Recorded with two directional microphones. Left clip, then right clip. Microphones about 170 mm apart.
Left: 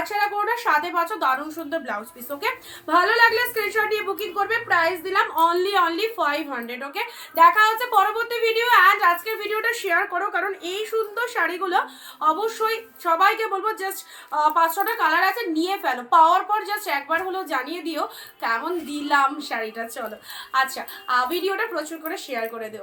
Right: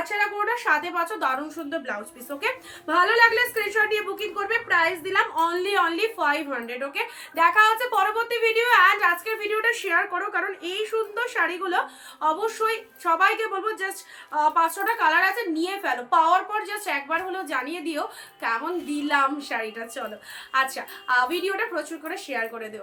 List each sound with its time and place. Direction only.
0.0 s a sound: 15° right (ahead or behind)
0.9 s a woman's voice: 20° right (ahead or behind)
14.3 s a woman's voice: 15° right (ahead or behind)
21.1 s a woman's voice: 20° right (ahead or behind)